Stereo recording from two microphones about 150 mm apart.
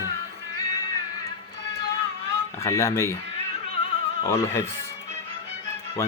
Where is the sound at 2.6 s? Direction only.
20° left (ahead or behind).